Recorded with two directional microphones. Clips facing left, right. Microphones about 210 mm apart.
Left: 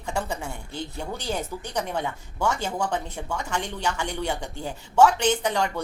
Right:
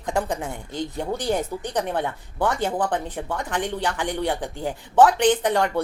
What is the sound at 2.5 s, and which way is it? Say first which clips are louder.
Speech: right 4 dB; 15° right (ahead or behind).